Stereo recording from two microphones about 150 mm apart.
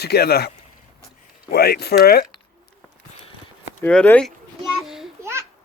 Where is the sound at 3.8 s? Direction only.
10° left (ahead or behind).